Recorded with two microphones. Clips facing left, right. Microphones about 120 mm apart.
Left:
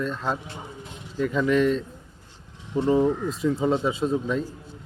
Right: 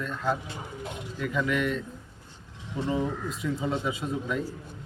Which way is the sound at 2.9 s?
40° left (ahead or behind).